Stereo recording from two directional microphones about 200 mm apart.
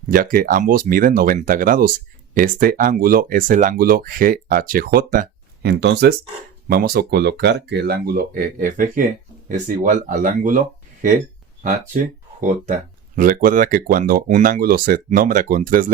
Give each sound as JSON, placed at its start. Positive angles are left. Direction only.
{"t": 0.1, "sound": "speech", "side_deg": -45}
{"t": 5.7, "sound": "speech", "side_deg": -60}
{"t": 12.4, "sound": "speech", "side_deg": -40}